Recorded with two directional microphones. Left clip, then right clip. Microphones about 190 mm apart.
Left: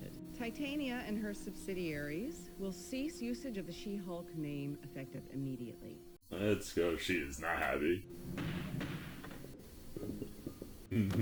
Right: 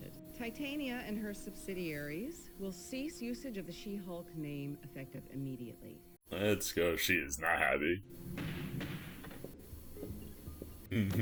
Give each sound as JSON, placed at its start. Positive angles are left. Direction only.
{"t": 0.0, "sound": "a woman's voice", "side_deg": 0}
{"t": 6.3, "sound": "speech", "side_deg": -25}
{"t": 8.4, "sound": "thump", "side_deg": 0}